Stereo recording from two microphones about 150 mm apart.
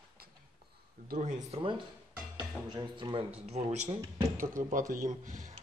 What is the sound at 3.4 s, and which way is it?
Speech, 45° right (ahead or behind).